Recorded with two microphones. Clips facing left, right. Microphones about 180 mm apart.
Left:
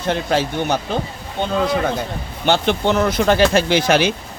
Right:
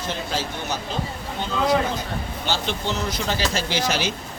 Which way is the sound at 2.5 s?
60° left (ahead or behind).